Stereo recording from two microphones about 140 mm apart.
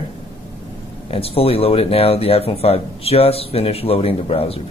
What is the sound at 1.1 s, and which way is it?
Speech, 45° left (ahead or behind).